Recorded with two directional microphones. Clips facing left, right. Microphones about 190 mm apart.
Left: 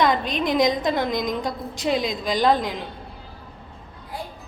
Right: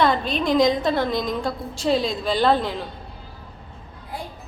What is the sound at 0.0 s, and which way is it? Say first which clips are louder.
A woman's voice: right 1 dB; 15° left (ahead or behind).